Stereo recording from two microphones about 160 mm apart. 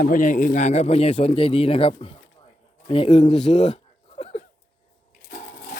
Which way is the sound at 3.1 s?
45° left (ahead or behind).